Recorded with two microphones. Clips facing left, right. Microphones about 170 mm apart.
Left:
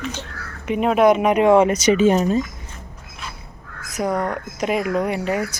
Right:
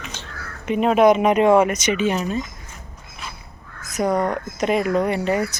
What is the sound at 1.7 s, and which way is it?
Speech, 35° left (ahead or behind).